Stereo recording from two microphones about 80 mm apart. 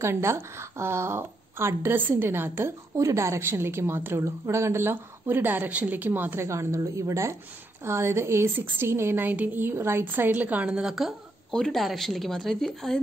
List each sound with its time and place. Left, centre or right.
0.0 s speech: right
3.0 s a woman's voice: right; by 10.8 s centre
10.8 s speech: centre